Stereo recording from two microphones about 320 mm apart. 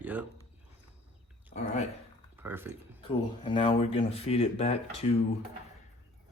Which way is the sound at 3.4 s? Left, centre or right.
Centre.